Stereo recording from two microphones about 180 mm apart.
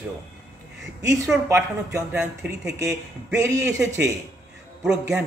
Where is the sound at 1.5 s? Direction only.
15° right (ahead or behind).